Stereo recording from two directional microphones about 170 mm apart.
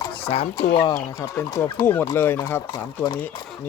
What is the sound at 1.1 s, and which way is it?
Speech, 15° left (ahead or behind).